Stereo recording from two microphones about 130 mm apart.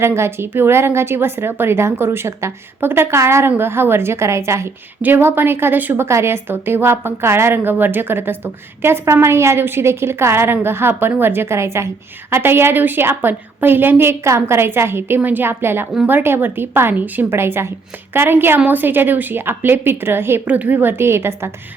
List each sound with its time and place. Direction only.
0.0 s a woman's voice: 20° right (ahead or behind)